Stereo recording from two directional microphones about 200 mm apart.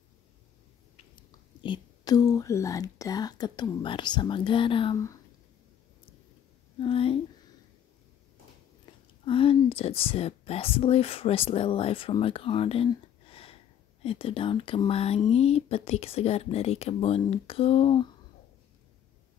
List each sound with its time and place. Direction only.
1.6 s speech: 20° left (ahead or behind)
6.8 s speech: 25° left (ahead or behind)
9.2 s speech: 25° left (ahead or behind)